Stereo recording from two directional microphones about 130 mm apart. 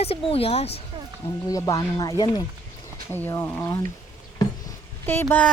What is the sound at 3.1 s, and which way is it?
Speech, 15° left (ahead or behind).